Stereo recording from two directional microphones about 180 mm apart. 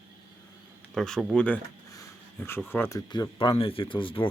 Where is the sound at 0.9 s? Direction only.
Centre (ahead or behind).